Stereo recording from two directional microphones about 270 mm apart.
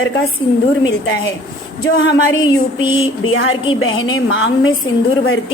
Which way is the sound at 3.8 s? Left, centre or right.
Left.